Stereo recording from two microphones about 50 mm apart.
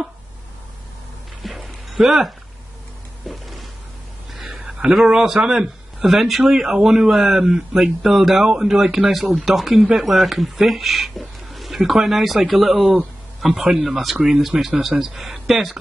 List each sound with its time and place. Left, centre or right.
1.4 s dog: centre
3.3 s music: centre
4.5 s a sound: centre
4.9 s a man's voice: centre
13.7 s a man's voice: centre